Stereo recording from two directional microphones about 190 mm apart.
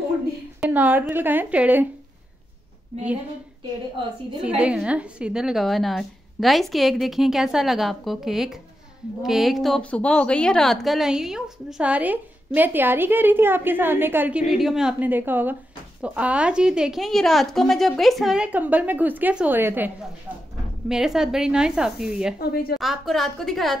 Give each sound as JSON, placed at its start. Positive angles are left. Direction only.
{"t": 0.6, "sound": "a woman's voice", "side_deg": -10}
{"t": 4.6, "sound": "a woman's voice", "side_deg": -5}
{"t": 20.9, "sound": "a woman's voice", "side_deg": -5}
{"t": 22.4, "sound": "a woman's voice", "side_deg": 55}
{"t": 22.8, "sound": "a woman's voice", "side_deg": 0}